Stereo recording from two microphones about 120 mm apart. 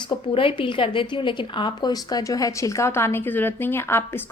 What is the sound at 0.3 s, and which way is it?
A woman's voice, 45° left (ahead or behind).